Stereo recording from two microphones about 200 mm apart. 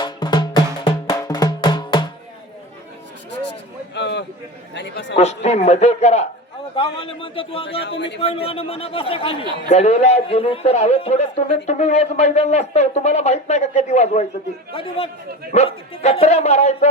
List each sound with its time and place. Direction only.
0.0 s music: 20° left (ahead or behind)
3.9 s a sound: 60° left (ahead or behind)
4.7 s chatter: 60° left (ahead or behind)
5.1 s a man's voice: 35° left (ahead or behind)
7.9 s speech: 60° left (ahead or behind)
8.2 s a man's voice: 30° left (ahead or behind)